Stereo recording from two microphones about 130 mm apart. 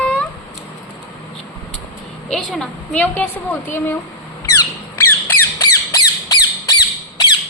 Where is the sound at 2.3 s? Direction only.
Centre (ahead or behind).